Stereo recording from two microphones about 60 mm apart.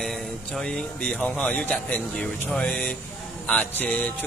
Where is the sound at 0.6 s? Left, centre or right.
Centre.